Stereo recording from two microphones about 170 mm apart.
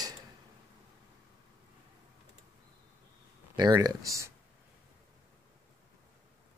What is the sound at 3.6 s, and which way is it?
Speech, 25° right (ahead or behind).